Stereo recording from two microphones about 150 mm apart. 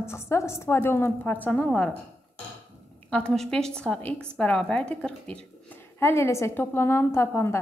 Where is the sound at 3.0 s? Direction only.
5° left (ahead or behind).